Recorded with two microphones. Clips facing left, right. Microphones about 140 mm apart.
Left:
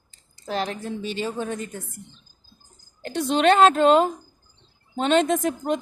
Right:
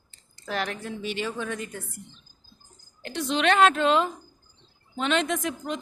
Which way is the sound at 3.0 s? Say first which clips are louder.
Left 5 dB; 45° left (ahead or behind).